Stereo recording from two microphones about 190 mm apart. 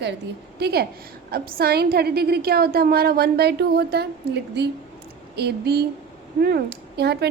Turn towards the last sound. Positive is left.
turn(degrees=-60)  # may be behind; listen again after turning